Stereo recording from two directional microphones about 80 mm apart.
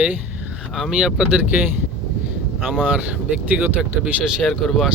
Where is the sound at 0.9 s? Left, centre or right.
Centre.